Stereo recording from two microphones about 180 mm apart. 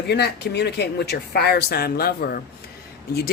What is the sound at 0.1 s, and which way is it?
Speech, 65° left (ahead or behind).